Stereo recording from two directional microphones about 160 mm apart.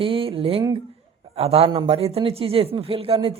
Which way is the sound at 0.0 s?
35° right (ahead or behind).